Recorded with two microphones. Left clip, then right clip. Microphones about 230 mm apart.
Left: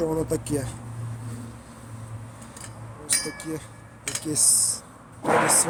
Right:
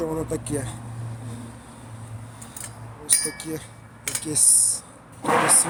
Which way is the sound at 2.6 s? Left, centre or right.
Right.